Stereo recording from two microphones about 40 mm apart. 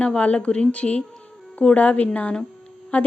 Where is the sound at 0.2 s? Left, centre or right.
Left.